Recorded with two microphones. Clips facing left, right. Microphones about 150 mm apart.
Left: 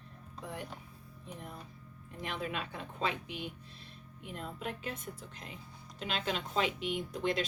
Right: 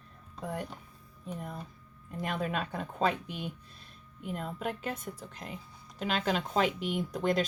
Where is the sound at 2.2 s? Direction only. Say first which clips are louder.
Right 5 dB; 45° right (ahead or behind).